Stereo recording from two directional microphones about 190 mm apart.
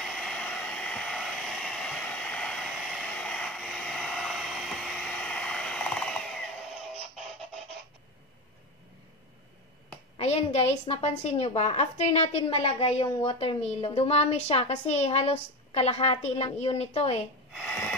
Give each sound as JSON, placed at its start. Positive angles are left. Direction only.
{"t": 0.0, "sound": "hair dryer", "side_deg": 0}
{"t": 10.1, "sound": "a woman's voice", "side_deg": 35}